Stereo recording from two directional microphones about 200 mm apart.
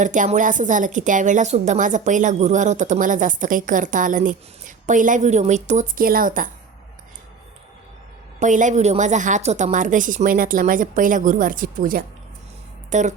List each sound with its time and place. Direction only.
0.0 s a woman's voice: 40° right (ahead or behind)
8.4 s a woman's voice: 40° right (ahead or behind)